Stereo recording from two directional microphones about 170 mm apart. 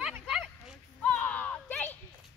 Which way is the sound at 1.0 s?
5° left (ahead or behind).